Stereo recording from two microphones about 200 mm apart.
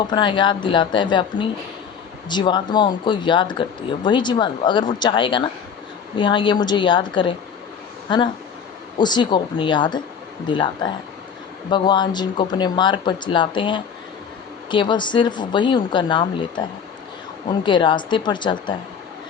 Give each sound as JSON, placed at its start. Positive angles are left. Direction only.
{"t": 0.1, "sound": "speech", "side_deg": 25}
{"t": 17.7, "sound": "speech", "side_deg": 25}